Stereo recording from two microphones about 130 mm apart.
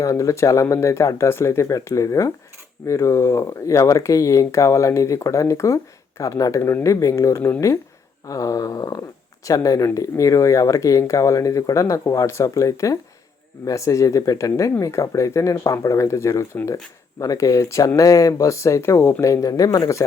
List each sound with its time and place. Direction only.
0.0 s speech: 25° left (ahead or behind)